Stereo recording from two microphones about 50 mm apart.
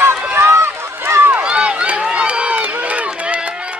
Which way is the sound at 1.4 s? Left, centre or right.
Right.